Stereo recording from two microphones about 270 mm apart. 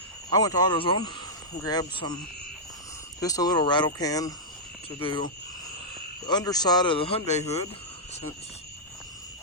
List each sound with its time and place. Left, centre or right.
0.3 s a man's voice: centre
3.2 s a man's voice: centre